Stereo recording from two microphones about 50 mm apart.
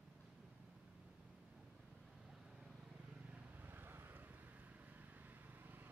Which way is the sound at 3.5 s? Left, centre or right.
Right.